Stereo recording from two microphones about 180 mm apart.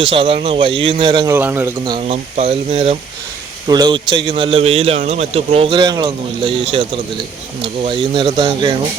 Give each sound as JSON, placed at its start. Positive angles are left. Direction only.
{"t": 0.1, "sound": "a man's voice", "side_deg": -30}
{"t": 1.4, "sound": "a man's voice", "side_deg": -10}
{"t": 1.8, "sound": "a man's voice", "side_deg": -25}
{"t": 2.3, "sound": "a man's voice", "side_deg": -35}
{"t": 3.7, "sound": "a man's voice", "side_deg": -25}